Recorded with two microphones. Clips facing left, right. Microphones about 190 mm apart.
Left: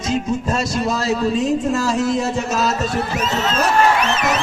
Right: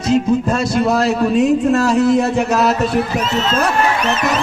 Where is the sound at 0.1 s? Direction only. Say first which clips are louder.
Right 6 dB; 60° right (ahead or behind).